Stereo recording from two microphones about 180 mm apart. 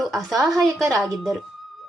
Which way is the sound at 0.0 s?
Centre (ahead or behind).